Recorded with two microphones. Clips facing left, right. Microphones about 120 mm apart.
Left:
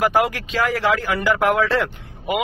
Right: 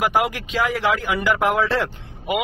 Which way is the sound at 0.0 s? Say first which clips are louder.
Left 2 dB; 15° right (ahead or behind).